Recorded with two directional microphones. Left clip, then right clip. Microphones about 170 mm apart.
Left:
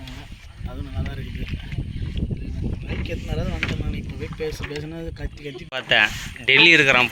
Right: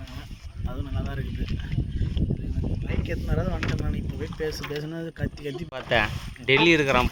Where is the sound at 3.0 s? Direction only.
10° right (ahead or behind).